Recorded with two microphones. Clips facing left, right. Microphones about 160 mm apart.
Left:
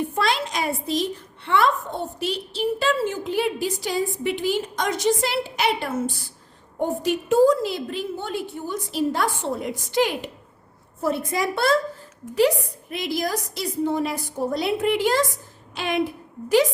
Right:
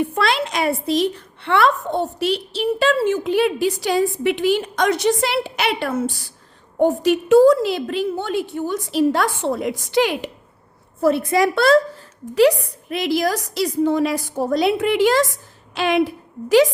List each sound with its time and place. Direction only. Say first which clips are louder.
0.1 s a woman's voice: right 3 dB; 70° right (ahead or behind); by 11.8 s 90° right
12.3 s a woman's voice: right 5 dB; 80° right